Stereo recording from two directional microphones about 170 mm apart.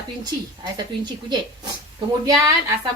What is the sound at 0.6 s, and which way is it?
A woman's voice, 25° right (ahead or behind).